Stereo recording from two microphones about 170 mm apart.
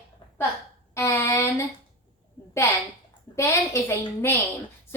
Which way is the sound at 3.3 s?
15° left (ahead or behind).